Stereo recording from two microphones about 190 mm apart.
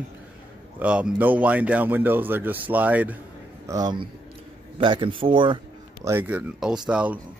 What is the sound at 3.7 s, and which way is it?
A man's voice, 20° right (ahead or behind).